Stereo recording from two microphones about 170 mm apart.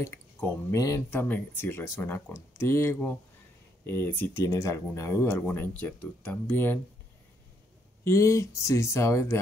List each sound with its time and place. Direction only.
0.0 s speech: 15° left (ahead or behind)
8.0 s speech: 15° left (ahead or behind)